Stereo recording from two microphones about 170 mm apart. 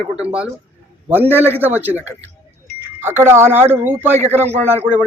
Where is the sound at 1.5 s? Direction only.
10° right (ahead or behind).